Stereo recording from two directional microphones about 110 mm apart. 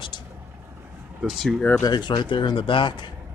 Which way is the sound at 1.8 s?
40° left (ahead or behind).